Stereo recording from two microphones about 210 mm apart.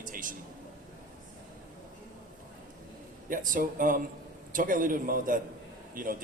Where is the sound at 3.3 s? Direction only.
40° right (ahead or behind).